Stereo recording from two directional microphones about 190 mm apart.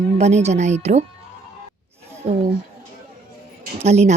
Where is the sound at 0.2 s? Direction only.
35° right (ahead or behind).